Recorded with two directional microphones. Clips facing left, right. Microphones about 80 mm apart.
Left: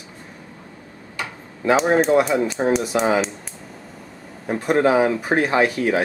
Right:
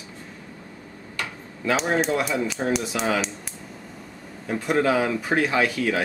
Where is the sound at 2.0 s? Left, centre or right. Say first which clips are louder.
Left 7 dB; left.